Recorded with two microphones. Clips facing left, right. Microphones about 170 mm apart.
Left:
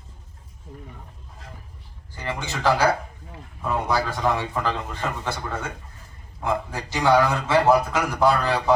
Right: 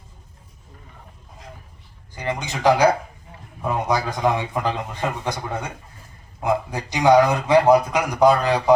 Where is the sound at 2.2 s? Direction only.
15° right (ahead or behind).